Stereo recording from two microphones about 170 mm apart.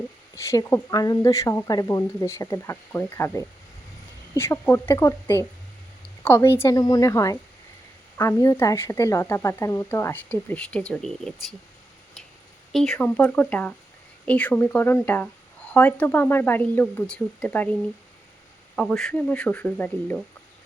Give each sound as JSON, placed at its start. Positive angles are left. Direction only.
{"t": 0.3, "sound": "speech", "side_deg": 15}
{"t": 12.7, "sound": "speech", "side_deg": 0}
{"t": 18.8, "sound": "speech", "side_deg": 5}